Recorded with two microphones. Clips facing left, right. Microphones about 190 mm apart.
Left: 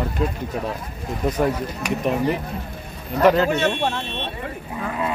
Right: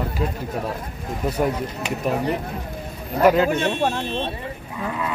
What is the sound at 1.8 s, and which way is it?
Speech, 25° right (ahead or behind).